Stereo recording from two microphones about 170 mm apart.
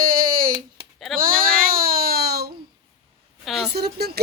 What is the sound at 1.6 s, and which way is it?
Baby cry, 60° right (ahead or behind).